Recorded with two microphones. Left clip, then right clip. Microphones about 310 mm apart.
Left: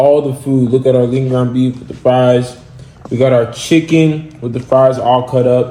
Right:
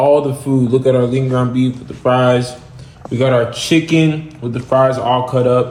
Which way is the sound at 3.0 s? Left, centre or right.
Centre.